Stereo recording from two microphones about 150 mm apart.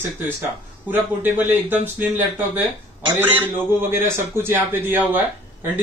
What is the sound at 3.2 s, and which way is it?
A man's voice, 15° right (ahead or behind).